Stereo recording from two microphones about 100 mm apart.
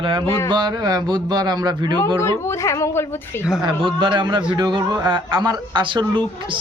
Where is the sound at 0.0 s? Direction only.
60° right (ahead or behind).